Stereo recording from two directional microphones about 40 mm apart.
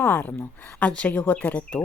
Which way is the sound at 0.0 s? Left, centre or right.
Left.